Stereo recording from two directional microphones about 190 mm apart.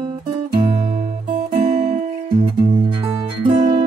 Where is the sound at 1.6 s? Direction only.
40° right (ahead or behind).